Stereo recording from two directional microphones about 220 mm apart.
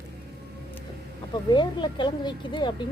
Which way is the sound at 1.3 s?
20° left (ahead or behind).